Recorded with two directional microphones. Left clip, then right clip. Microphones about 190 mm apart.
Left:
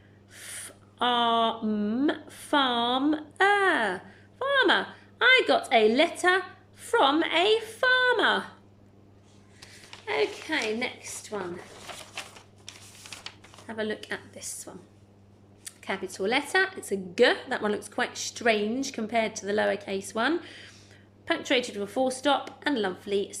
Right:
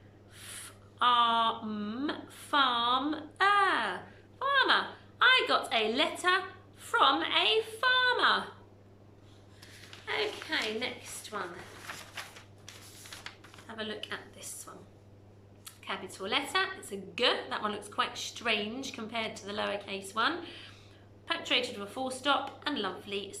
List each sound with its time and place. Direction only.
0.3 s a sound: 35° left (ahead or behind)
5.2 s a woman's voice: 35° left (ahead or behind)
10.1 s a woman's voice: 30° left (ahead or behind)
13.7 s speech: 35° left (ahead or behind)